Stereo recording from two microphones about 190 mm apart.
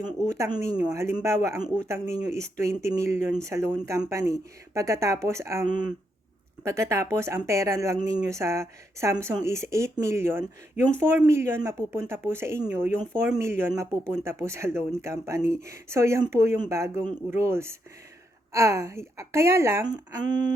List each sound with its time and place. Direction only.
0.0 s speech: 15° right (ahead or behind)
6.7 s speech: 15° right (ahead or behind)